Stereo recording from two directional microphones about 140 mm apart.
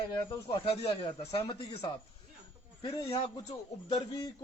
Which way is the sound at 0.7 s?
45° left (ahead or behind).